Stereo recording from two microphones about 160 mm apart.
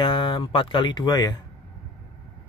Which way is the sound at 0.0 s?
30° left (ahead or behind).